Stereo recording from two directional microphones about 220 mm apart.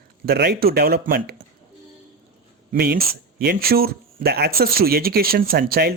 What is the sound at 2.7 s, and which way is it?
Speech, 45° right (ahead or behind).